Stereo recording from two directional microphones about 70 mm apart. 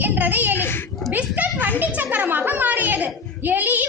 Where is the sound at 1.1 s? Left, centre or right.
Right.